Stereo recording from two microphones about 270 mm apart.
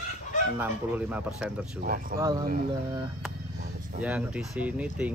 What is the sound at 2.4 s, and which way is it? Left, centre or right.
Speech, right.